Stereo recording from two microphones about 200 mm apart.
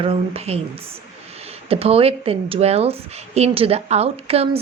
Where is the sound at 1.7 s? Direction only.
30° right (ahead or behind).